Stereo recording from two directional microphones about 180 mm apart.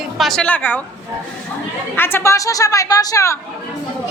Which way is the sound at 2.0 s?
15° left (ahead or behind).